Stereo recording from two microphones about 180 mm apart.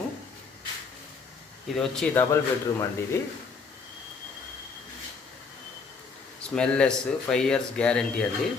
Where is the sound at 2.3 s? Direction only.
15° left (ahead or behind).